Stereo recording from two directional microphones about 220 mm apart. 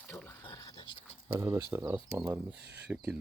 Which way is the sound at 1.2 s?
15° right (ahead or behind).